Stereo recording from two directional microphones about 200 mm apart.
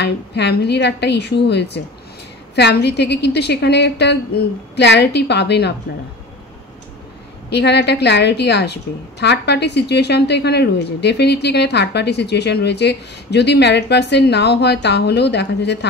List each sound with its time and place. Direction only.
0.0 s a woman's voice: 55° left (ahead or behind)
7.4 s a woman's voice: 55° left (ahead or behind)